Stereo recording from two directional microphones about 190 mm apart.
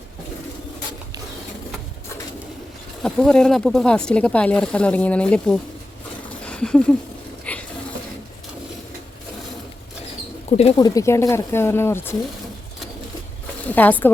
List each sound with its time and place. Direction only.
3.0 s speech: 5° left (ahead or behind)
6.4 s a sound: 5° left (ahead or behind)
7.5 s ratchet: 5° left (ahead or behind)
10.5 s speech: 35° left (ahead or behind)
10.8 s speech: 20° left (ahead or behind)
13.7 s speech: 10° left (ahead or behind)